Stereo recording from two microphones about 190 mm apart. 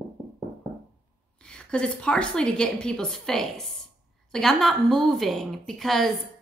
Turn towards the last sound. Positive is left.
turn(degrees=0)  # may be behind; listen again after turning